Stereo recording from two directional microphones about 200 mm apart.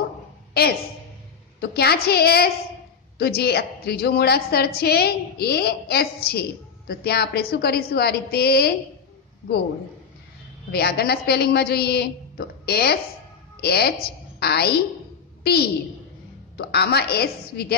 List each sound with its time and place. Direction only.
1.6 s a woman's voice: 50° left (ahead or behind)
10.7 s a woman's voice: 50° left (ahead or behind)